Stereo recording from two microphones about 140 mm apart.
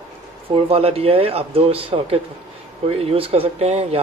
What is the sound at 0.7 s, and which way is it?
Speech, 45° right (ahead or behind).